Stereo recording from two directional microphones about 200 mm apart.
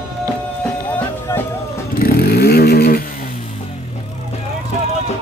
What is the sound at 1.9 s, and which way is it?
Vehicle, 50° left (ahead or behind).